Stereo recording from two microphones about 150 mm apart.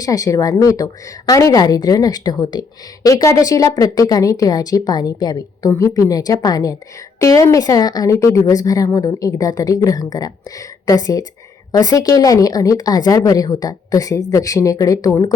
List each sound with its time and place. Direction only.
0.0 s a woman's voice: 25° left (ahead or behind)